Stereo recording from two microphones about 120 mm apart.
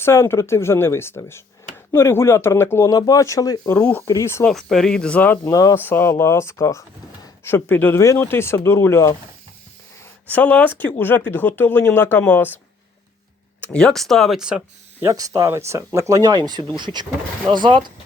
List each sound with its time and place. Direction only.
0.0 s speech: 20° left (ahead or behind)
3.7 s speech: 15° left (ahead or behind)
4.0 s speech: 25° left (ahead or behind)
4.4 s speech: 5° left (ahead or behind)
5.5 s speech: 30° left (ahead or behind)
5.7 s speech: 15° left (ahead or behind)
10.2 s speech: 10° left (ahead or behind)
13.6 s speech: 5° left (ahead or behind)
15.0 s speech: 30° right (ahead or behind)